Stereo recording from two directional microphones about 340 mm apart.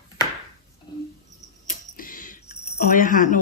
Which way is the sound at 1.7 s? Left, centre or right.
Left.